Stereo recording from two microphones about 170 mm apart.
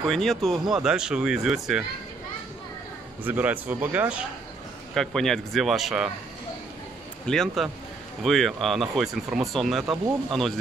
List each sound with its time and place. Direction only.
0.1 s speech: centre (ahead or behind)
3.3 s speech: 10° right (ahead or behind)
4.9 s speech: 5° left (ahead or behind)
7.2 s speech: centre (ahead or behind)